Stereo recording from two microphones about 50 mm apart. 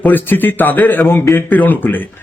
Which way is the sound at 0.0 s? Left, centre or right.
Left.